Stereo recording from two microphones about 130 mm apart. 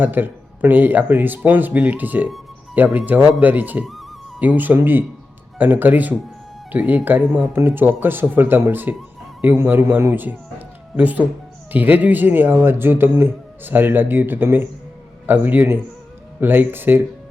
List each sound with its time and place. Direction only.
0.0 s speech: 15° right (ahead or behind)